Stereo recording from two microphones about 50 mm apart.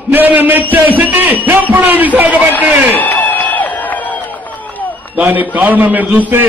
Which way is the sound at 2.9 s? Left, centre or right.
Left.